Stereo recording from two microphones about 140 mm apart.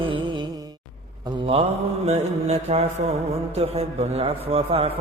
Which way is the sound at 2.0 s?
50° right (ahead or behind).